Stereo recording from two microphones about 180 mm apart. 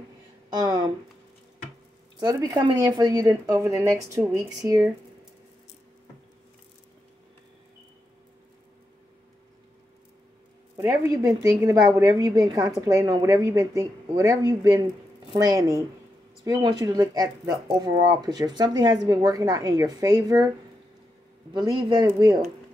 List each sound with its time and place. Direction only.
0.5 s speech: 25° right (ahead or behind)
2.1 s a woman's voice: 20° right (ahead or behind)
10.8 s a woman's voice: 20° right (ahead or behind)
21.5 s a woman's voice: 25° right (ahead or behind)